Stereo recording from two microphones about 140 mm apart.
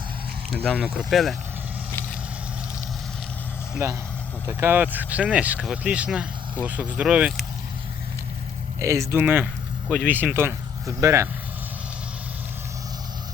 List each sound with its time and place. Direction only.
0.5 s speech: 5° left (ahead or behind)
0.8 s speech: 5° right (ahead or behind)
3.8 s speech: 20° right (ahead or behind)
8.8 s speech: 20° right (ahead or behind)